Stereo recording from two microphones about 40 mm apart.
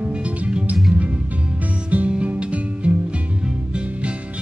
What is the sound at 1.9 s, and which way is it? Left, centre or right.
Music, right.